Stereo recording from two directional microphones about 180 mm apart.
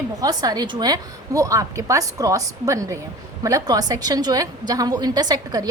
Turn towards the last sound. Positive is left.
turn(degrees=-20)  # may be behind; listen again after turning